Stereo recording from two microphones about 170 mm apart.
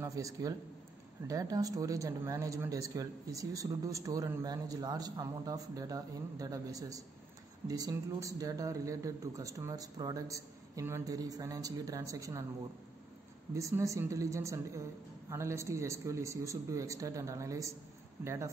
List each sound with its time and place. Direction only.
0.0 s speech: 20° right (ahead or behind)
13.6 s a man's voice: 20° right (ahead or behind)